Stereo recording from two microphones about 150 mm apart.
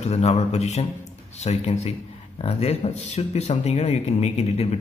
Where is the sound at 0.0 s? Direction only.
45° left (ahead or behind).